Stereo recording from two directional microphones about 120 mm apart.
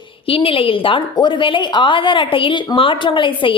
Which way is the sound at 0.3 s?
50° left (ahead or behind).